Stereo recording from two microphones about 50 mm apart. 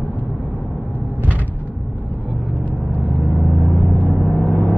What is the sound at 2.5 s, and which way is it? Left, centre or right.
Vehicle, left.